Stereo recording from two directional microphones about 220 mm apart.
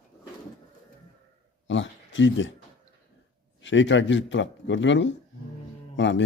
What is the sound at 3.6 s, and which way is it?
A man's voice, 55° left (ahead or behind).